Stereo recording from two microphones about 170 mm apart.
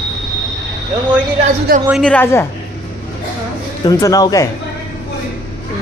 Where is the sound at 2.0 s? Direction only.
10° left (ahead or behind).